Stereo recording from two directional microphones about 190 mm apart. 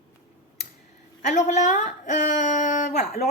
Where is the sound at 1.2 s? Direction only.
40° left (ahead or behind).